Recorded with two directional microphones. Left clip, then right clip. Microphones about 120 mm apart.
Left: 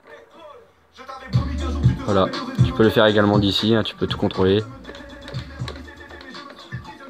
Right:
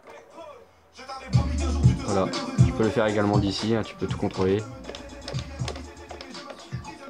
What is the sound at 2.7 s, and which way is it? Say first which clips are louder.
Speech: left 8 dB; 45° left (ahead or behind).